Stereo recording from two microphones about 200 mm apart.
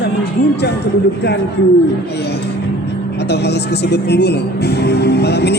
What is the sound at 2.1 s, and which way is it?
Speech, 55° left (ahead or behind).